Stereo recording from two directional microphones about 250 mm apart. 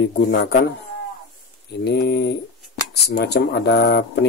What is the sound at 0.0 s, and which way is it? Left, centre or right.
Speech, left.